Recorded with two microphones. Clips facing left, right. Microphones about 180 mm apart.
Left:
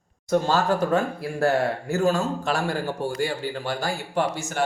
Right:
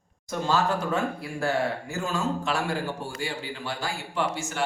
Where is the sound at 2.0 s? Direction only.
40° left (ahead or behind).